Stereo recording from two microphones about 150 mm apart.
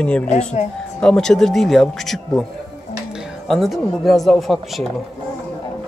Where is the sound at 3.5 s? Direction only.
Centre (ahead or behind).